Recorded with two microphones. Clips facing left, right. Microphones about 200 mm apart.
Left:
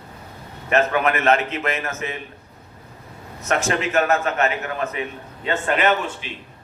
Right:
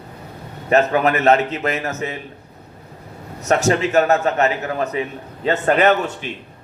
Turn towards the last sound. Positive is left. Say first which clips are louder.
# right 4 dB
turn(degrees=-40)  # may be behind; listen again after turning